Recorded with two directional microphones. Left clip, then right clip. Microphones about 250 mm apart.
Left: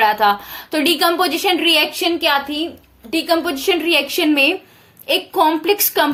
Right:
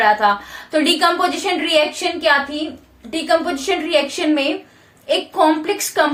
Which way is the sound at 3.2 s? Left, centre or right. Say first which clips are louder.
Right 1 dB; left.